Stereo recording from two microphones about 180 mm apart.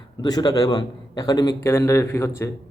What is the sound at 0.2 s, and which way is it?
A man's voice, 20° left (ahead or behind).